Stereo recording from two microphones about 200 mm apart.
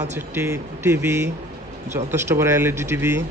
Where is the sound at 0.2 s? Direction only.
15° right (ahead or behind).